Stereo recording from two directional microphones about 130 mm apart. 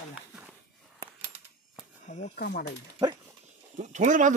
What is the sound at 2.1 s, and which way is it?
Snake, 65° left (ahead or behind).